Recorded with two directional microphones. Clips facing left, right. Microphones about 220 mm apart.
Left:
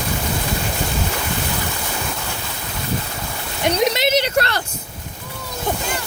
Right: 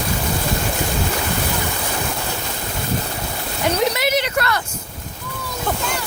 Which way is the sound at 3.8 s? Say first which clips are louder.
Left 3 dB; 20° left (ahead or behind).